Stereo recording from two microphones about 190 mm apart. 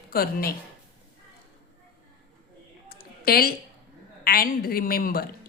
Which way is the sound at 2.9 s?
50° left (ahead or behind).